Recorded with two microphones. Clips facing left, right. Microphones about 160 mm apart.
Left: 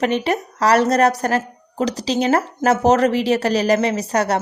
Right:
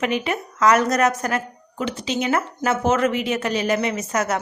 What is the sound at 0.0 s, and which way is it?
Speech, 35° left (ahead or behind).